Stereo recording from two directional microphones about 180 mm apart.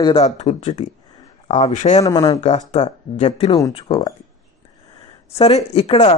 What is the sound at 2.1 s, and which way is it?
Speech, 20° left (ahead or behind).